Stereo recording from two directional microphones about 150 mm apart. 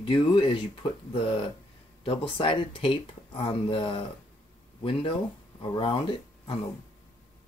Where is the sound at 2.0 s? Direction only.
35° left (ahead or behind).